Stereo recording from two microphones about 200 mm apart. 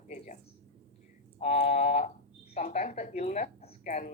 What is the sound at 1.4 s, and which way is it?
Speech, 35° left (ahead or behind).